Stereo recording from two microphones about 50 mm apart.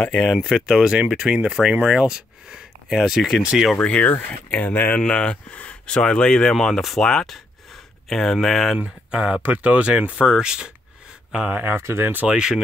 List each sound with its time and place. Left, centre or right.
0.1 s speech: centre
0.9 s speech: right
2.9 s speech: centre
3.7 s speech: left
4.3 s speech: left
6.5 s speech: centre
7.3 s a sound: centre
9.1 s speech: right
11.4 s speech: right
11.7 s speech: right
12.0 s speech: right
12.3 s speech: centre